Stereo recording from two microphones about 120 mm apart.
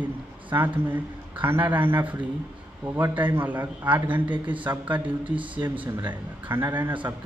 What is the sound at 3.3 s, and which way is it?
Speech, 15° right (ahead or behind).